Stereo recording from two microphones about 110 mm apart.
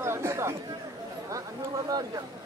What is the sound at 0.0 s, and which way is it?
Chatter, 20° right (ahead or behind).